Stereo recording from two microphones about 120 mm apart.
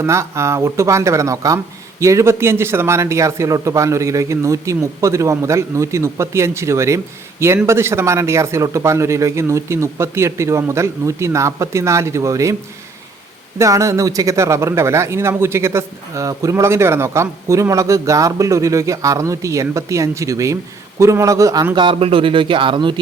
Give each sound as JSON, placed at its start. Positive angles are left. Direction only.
{"t": 0.0, "sound": "speech", "side_deg": -25}
{"t": 13.6, "sound": "speech", "side_deg": -25}
{"t": 21.8, "sound": "speech", "side_deg": -50}